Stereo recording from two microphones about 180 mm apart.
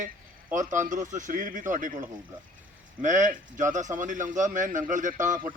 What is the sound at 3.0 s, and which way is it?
A man's voice, 45° right (ahead or behind).